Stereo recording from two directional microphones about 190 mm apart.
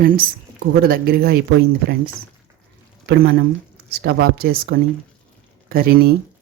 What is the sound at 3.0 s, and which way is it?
Speech, 60° right (ahead or behind).